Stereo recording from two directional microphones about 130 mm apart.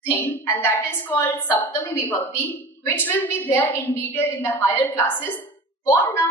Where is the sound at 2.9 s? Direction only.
15° left (ahead or behind).